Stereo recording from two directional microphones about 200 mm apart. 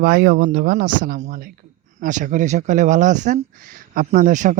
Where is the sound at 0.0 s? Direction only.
50° right (ahead or behind).